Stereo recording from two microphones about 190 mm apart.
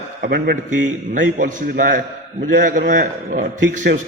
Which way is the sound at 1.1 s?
45° right (ahead or behind).